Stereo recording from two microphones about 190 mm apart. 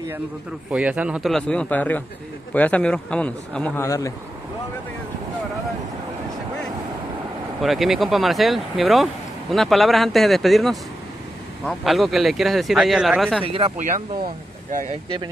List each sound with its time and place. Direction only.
0.7 s a man's voice: 5° right (ahead or behind); by 4.1 s 15° left (ahead or behind)
7.6 s speech: centre (ahead or behind)
13.4 s speech: 30° right (ahead or behind)